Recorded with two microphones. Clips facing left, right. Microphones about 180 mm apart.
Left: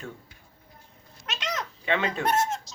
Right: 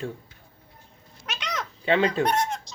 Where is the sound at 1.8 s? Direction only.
35° right (ahead or behind).